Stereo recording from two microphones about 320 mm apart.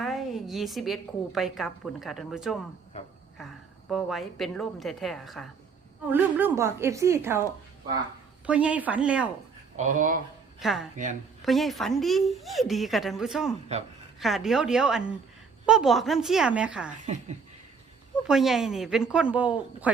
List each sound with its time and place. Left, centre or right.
0.0 s a woman's voice: centre
8.4 s a woman's voice: centre
9.7 s speech: right
10.6 s a woman's voice: centre
10.9 s speech: right
11.4 s a woman's voice: centre
18.3 s a woman's voice: centre